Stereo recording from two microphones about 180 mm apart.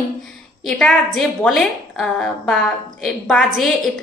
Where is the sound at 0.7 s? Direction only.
5° left (ahead or behind).